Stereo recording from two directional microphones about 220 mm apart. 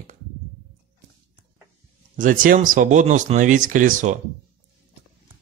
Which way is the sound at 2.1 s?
40° right (ahead or behind).